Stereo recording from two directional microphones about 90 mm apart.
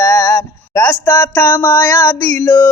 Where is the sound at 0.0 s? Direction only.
30° left (ahead or behind).